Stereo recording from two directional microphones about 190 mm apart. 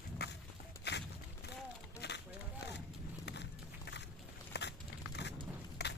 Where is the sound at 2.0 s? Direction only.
60° left (ahead or behind).